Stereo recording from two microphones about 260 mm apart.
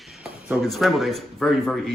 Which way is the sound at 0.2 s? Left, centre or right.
Centre.